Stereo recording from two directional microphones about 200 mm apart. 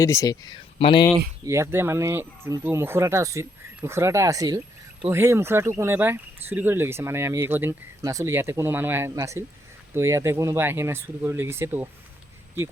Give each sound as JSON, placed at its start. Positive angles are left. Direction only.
{"t": 0.0, "sound": "speech", "side_deg": 15}
{"t": 1.5, "sound": "speech", "side_deg": -15}